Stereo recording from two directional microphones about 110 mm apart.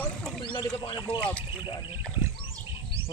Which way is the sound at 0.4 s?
50° left (ahead or behind).